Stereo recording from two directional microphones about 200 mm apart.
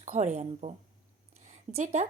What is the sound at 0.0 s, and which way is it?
Speech, 35° right (ahead or behind).